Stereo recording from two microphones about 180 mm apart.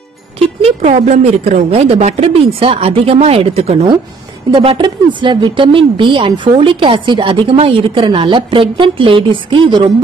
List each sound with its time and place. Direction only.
0.6 s a woman's voice: 35° right (ahead or behind)